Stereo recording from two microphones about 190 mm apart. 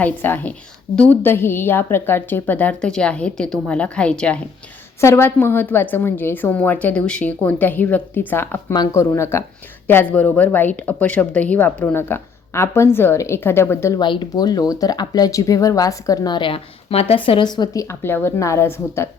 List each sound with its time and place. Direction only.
0.0 s a woman's voice: 10° left (ahead or behind)
14.0 s speech: 25° left (ahead or behind)